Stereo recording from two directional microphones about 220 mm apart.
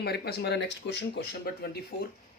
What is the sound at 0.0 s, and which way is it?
Speech, 45° left (ahead or behind).